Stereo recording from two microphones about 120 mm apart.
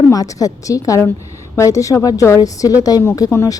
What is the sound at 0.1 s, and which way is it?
A woman's voice, 30° left (ahead or behind).